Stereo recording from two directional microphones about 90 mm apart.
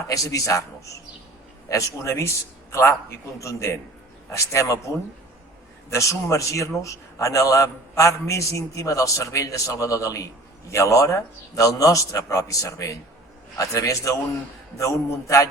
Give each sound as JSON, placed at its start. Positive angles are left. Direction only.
{"t": 0.1, "sound": "a man's voice", "side_deg": 40}
{"t": 1.7, "sound": "a man's voice", "side_deg": 35}